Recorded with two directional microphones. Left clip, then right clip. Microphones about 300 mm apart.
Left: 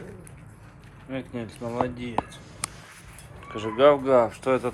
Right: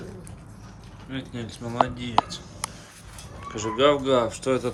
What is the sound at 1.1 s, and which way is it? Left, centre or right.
Speech, centre.